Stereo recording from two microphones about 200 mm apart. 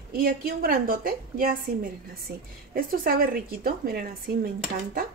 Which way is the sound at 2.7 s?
45° right (ahead or behind).